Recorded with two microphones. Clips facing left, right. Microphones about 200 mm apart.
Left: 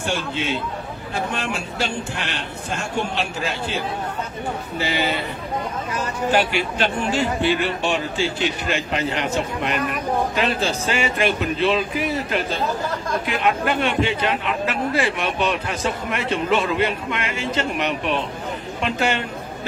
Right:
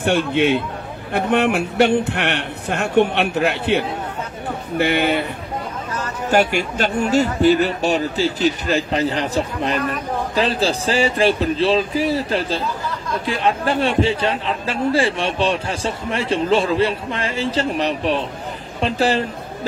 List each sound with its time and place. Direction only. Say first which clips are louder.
0.0 s a man's voice: right 8 dB; 60° right (ahead or behind)
6.3 s a man's voice: right 5 dB; 45° right (ahead or behind)